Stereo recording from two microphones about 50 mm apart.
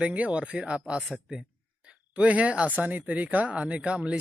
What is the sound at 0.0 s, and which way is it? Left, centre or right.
Speech, right.